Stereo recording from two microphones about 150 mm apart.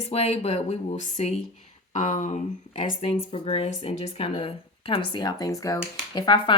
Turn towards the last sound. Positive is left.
turn(degrees=30)  # may be behind; listen again after turning